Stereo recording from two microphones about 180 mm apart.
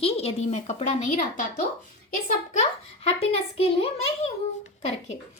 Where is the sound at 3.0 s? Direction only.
35° left (ahead or behind).